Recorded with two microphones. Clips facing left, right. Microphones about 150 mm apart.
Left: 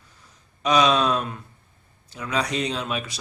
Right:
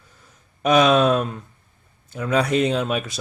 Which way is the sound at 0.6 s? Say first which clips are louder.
Right 4 dB; 50° right (ahead or behind).